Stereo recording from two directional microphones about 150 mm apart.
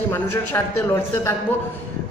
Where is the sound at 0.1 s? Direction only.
15° left (ahead or behind).